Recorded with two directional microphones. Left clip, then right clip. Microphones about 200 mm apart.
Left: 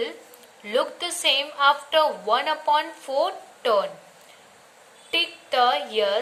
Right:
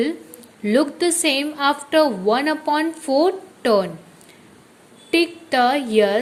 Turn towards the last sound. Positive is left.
turn(degrees=-30)  # may be behind; listen again after turning